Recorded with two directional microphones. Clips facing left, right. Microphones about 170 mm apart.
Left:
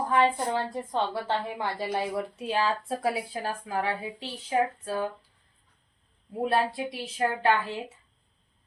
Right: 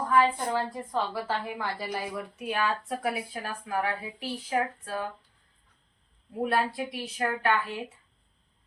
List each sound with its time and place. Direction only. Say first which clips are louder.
0.1 s a woman's voice: even; 25° left (ahead or behind)
6.4 s a woman's voice: left 1 dB; 25° left (ahead or behind)